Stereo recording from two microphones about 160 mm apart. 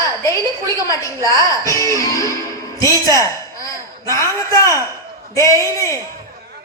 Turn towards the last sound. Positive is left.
turn(degrees=20)  # may be behind; listen again after turning